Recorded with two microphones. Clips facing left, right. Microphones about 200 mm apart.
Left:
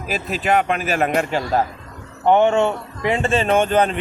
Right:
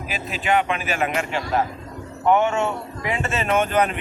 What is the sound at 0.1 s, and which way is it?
Speech, 40° left (ahead or behind).